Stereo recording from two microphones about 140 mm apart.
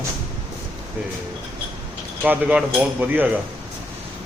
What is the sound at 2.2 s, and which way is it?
A man's voice, 10° right (ahead or behind).